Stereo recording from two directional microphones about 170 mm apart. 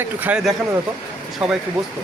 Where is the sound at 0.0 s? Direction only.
5° right (ahead or behind).